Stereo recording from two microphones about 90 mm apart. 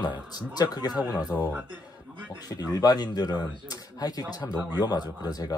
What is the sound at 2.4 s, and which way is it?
Speech, 45° left (ahead or behind).